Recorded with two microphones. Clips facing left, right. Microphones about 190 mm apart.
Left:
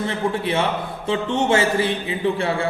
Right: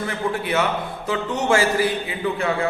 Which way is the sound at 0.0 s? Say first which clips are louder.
Left 2 dB; 25° left (ahead or behind).